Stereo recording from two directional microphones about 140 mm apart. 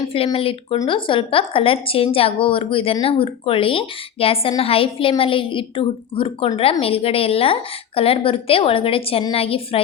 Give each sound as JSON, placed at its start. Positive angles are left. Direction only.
{"t": 0.3, "sound": "a woman's voice", "side_deg": 40}